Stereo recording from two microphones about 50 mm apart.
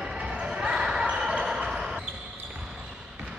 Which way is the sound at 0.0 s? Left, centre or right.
Centre.